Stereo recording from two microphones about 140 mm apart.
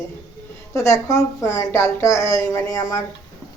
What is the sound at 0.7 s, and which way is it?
Speech, 20° left (ahead or behind).